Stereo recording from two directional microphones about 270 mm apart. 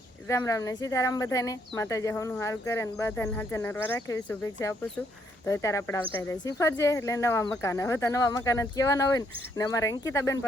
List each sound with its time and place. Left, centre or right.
0.3 s speech: centre